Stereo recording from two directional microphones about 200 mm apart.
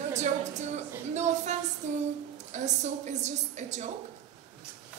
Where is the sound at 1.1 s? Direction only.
35° right (ahead or behind).